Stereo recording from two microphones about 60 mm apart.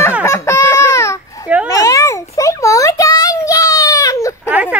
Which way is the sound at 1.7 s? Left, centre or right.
Left.